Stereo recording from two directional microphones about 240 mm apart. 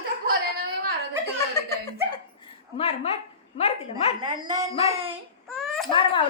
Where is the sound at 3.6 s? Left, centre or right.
Left.